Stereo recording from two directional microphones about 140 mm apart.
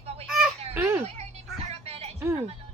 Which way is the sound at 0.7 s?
15° right (ahead or behind).